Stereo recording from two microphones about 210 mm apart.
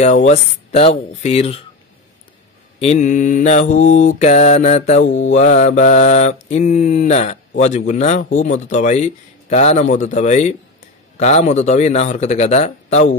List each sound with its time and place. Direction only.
0.0 s mantra: 35° left (ahead or behind)
2.8 s mantra: 35° left (ahead or behind)